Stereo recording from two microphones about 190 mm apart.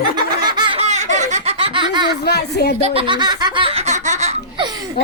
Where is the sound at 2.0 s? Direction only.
60° left (ahead or behind).